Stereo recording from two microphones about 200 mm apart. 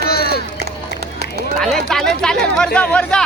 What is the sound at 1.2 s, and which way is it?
Run, 55° right (ahead or behind).